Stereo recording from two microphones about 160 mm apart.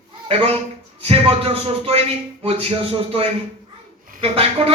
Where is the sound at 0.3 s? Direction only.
40° right (ahead or behind).